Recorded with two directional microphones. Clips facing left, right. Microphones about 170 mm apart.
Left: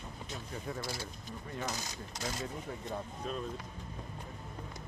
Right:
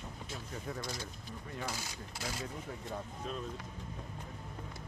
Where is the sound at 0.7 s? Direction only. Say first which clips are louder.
Left 1 dB; 15° left (ahead or behind).